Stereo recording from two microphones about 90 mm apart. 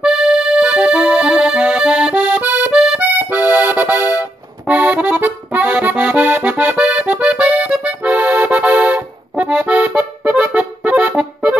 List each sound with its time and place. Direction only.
0.0 s music: 5° right (ahead or behind)
2.7 s accordion: 5° right (ahead or behind)
3.0 s accordion: 20° right (ahead or behind)